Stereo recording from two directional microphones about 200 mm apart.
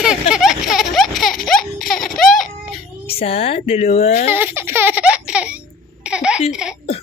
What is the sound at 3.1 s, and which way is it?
Speech, 30° left (ahead or behind).